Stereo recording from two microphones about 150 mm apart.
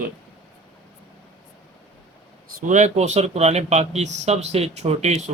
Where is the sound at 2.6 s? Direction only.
55° right (ahead or behind).